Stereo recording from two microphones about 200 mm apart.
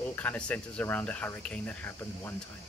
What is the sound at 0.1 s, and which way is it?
Speech, 10° left (ahead or behind).